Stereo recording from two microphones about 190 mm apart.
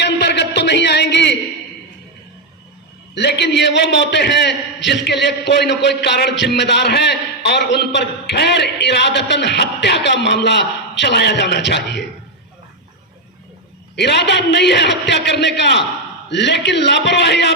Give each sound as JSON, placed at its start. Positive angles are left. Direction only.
{"t": 0.0, "sound": "a sound", "side_deg": 65}
{"t": 3.2, "sound": "a man's voice", "side_deg": 65}
{"t": 13.9, "sound": "a man's voice", "side_deg": 65}